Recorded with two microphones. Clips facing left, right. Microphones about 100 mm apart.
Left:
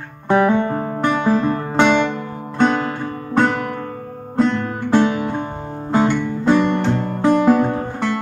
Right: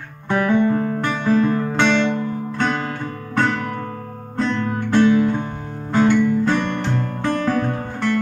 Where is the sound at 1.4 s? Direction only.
35° left (ahead or behind).